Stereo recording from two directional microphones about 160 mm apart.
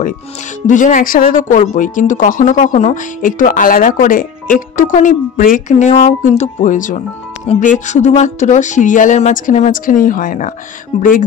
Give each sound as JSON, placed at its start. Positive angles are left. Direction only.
{"t": 0.7, "sound": "speech", "side_deg": 55}